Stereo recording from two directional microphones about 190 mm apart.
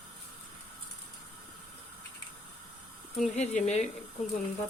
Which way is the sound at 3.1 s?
35° left (ahead or behind).